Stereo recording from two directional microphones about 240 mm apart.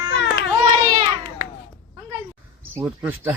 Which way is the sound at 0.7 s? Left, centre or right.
Centre.